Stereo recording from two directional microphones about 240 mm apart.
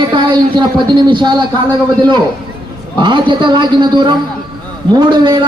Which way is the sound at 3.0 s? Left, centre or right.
Centre.